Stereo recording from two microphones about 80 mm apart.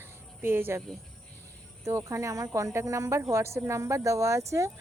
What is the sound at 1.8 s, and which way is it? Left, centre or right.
Speech, right.